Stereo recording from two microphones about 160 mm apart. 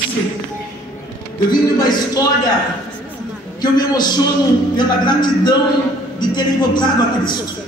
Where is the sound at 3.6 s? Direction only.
25° left (ahead or behind).